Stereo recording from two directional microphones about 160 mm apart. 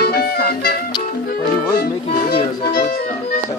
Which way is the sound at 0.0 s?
75° left (ahead or behind).